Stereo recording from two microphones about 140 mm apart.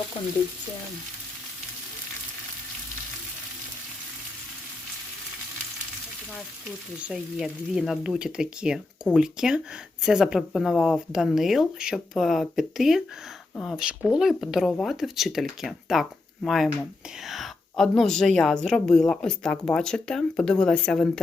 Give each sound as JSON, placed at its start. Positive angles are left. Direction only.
{"t": 7.1, "sound": "a woman's voice", "side_deg": -5}